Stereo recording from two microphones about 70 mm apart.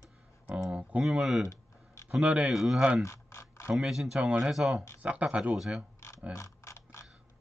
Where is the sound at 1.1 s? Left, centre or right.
Centre.